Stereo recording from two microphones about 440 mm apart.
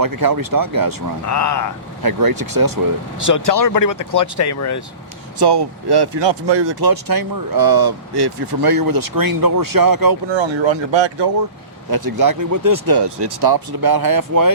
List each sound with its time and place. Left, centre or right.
0.0 s speech: right
1.3 s speech: left
2.0 s speech: right
3.2 s speech: left
5.4 s speech: right
10.3 s speech: right
11.9 s speech: right